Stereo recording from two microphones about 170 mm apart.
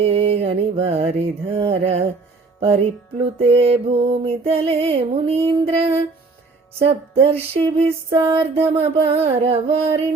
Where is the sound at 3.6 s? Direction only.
35° right (ahead or behind).